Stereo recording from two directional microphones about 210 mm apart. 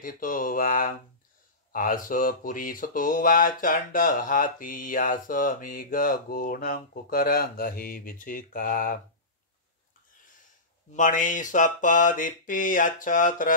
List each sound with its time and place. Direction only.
0.0 s speech: 40° left (ahead or behind)
11.0 s speech: 35° left (ahead or behind)